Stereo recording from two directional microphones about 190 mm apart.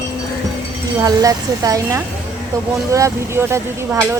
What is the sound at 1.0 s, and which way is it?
Speech, 20° right (ahead or behind).